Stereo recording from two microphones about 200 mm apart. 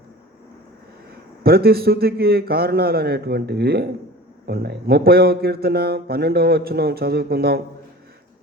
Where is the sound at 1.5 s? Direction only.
50° right (ahead or behind).